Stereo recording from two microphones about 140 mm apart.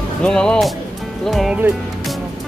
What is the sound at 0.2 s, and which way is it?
Speech, 5° left (ahead or behind).